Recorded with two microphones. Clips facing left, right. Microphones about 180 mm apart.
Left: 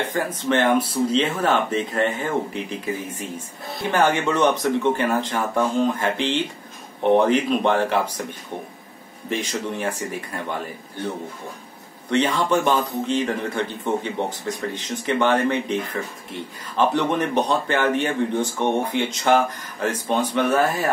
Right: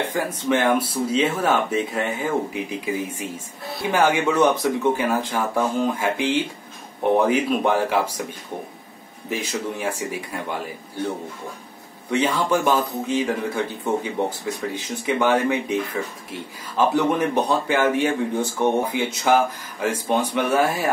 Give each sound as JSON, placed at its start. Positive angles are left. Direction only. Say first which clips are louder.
{"t": 0.0, "sound": "a man's voice", "louder": "even", "side_deg": -10}
{"t": 9.3, "sound": "a man's voice", "louder": "left 1 dB", "side_deg": -5}
{"t": 12.1, "sound": "a man's voice", "louder": "left 1 dB", "side_deg": -5}